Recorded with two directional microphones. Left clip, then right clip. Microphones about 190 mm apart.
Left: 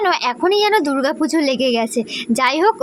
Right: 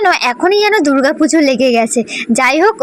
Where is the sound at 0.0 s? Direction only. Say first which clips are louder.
Right 5 dB; 15° right (ahead or behind).